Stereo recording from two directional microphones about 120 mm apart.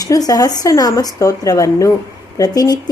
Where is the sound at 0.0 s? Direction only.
30° left (ahead or behind).